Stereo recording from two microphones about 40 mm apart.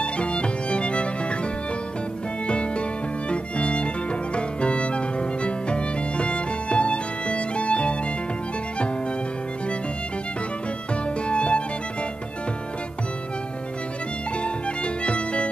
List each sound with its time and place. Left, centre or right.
0.0 s music: left
2.4 s music: left
11.2 s music: left
14.4 s music: left